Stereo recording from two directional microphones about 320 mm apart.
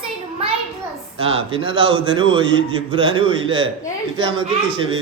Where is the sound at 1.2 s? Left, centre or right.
Centre.